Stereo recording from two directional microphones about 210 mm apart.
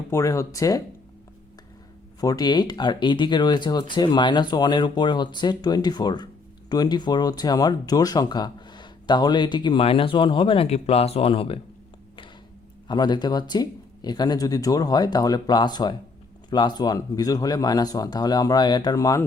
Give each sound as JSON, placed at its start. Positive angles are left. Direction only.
{"t": 0.1, "sound": "speech", "side_deg": 15}
{"t": 2.2, "sound": "speech", "side_deg": 20}
{"t": 12.9, "sound": "speech", "side_deg": 20}